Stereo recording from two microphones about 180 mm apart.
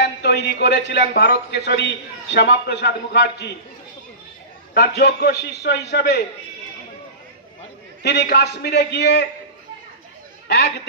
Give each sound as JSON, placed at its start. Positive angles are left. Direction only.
{"t": 0.0, "sound": "a man's voice", "side_deg": 70}
{"t": 4.7, "sound": "a man's voice", "side_deg": 65}
{"t": 8.0, "sound": "a man's voice", "side_deg": 65}